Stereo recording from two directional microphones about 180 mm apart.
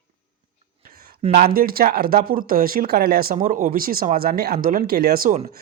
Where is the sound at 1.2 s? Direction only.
35° right (ahead or behind).